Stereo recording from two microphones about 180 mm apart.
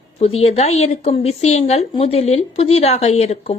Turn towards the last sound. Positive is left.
turn(degrees=35)  # may be behind; listen again after turning